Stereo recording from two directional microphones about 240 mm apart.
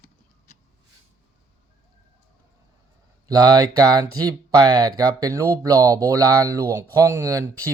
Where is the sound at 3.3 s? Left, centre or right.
Centre.